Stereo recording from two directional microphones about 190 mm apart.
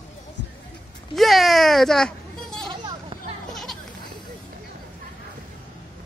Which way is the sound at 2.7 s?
25° right (ahead or behind).